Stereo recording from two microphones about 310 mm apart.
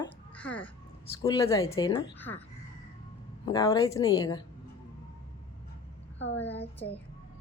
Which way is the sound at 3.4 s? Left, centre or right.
Centre.